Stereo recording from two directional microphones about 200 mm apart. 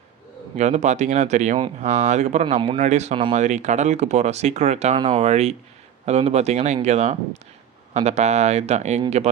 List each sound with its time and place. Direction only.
0.5 s speech: 35° right (ahead or behind)